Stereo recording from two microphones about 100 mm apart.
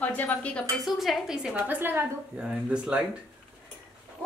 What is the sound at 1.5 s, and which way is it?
A woman's voice, 20° right (ahead or behind).